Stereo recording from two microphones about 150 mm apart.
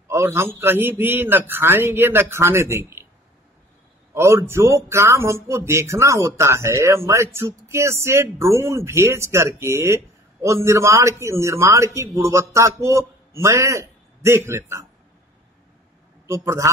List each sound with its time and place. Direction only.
0.1 s a man's voice: 15° right (ahead or behind)
4.1 s a man's voice: 20° right (ahead or behind)
16.3 s speech: 20° right (ahead or behind)